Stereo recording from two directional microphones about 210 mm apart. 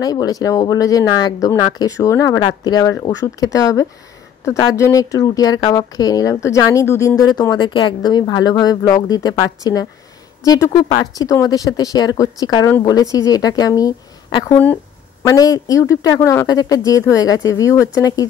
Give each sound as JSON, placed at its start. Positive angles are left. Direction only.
{"t": 0.0, "sound": "speech", "side_deg": 20}